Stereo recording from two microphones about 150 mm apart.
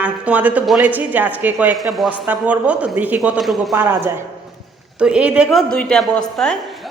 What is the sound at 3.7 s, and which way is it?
A woman's voice, 15° right (ahead or behind).